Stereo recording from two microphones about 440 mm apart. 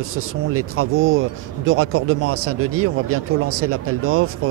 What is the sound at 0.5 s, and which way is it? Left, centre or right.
Speech, right.